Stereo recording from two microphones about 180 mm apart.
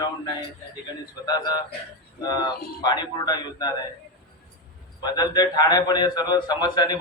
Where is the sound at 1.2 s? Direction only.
20° left (ahead or behind).